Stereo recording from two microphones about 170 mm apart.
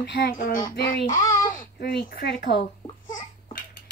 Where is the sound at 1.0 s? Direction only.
20° left (ahead or behind).